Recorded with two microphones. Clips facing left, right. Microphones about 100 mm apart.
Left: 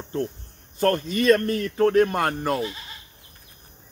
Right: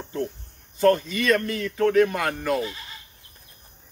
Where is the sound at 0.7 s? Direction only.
45° left (ahead or behind).